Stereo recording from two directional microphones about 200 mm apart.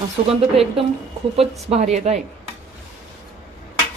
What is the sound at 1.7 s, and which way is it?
Speech, 35° right (ahead or behind).